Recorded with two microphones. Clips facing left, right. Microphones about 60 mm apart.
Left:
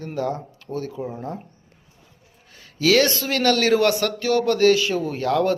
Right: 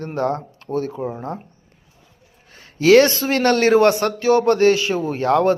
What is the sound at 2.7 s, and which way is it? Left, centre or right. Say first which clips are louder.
Speech: right 6 dB; right.